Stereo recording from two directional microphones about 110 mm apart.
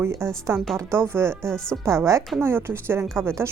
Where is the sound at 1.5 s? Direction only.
5° left (ahead or behind).